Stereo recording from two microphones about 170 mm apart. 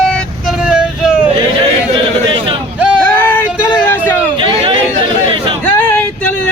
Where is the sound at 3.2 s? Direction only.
10° left (ahead or behind).